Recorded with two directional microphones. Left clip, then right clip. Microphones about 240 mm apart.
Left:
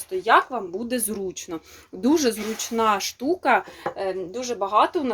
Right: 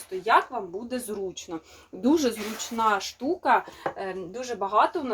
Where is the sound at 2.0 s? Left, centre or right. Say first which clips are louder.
Left 3 dB; left.